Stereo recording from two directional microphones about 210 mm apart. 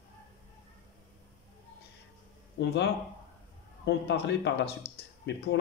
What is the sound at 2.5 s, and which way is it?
Speech, 55° left (ahead or behind).